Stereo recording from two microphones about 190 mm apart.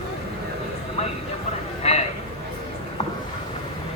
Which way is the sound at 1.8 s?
35° left (ahead or behind).